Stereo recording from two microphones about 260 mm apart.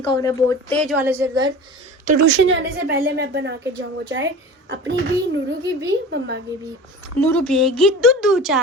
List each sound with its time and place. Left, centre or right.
0.1 s speech: centre
0.9 s a woman's voice: centre
2.3 s a woman's voice: right
7.2 s a woman's voice: centre